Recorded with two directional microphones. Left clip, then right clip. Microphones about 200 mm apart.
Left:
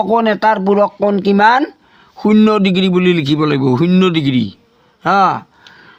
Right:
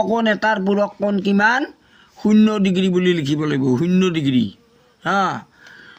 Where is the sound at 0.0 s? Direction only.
40° left (ahead or behind).